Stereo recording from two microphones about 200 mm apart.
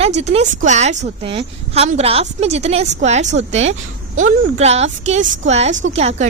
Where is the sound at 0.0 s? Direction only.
35° right (ahead or behind).